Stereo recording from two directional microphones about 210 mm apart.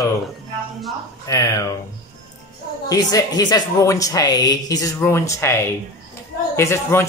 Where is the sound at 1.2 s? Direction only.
15° left (ahead or behind).